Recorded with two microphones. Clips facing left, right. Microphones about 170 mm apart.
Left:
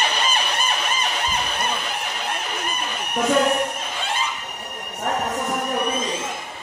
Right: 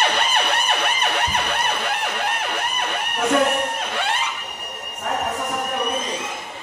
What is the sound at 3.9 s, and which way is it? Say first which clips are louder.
Music: right 2 dB; 70° right (ahead or behind).